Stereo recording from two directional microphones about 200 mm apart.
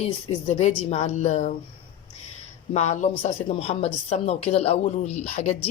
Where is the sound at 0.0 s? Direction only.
30° left (ahead or behind).